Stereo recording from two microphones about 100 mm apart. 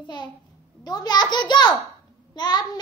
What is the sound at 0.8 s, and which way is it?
A child's voice, 40° left (ahead or behind).